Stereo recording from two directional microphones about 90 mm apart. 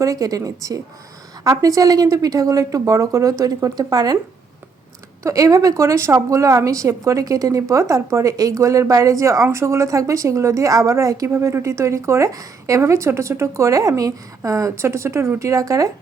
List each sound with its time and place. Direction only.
0.0 s a woman's voice: 40° right (ahead or behind)
5.2 s a woman's voice: 40° right (ahead or behind)